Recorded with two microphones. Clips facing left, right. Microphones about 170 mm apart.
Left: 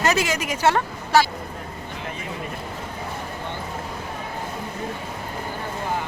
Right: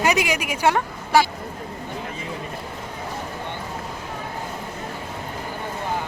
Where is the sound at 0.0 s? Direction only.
15° right (ahead or behind).